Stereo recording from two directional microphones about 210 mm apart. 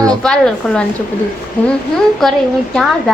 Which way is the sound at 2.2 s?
Centre (ahead or behind).